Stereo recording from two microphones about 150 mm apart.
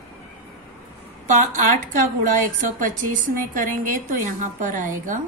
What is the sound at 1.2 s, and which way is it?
A woman's voice, 60° right (ahead or behind).